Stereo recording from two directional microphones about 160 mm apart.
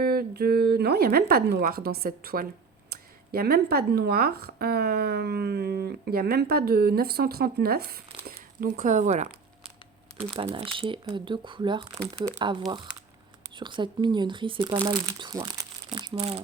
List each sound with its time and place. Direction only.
0.0 s speech: 75° right (ahead or behind)
2.9 s speech: 75° right (ahead or behind)
8.6 s speech: 55° right (ahead or behind)
10.3 s speech: 35° right (ahead or behind)
15.5 s crumpling: 25° right (ahead or behind)
16.1 s speech: 40° right (ahead or behind)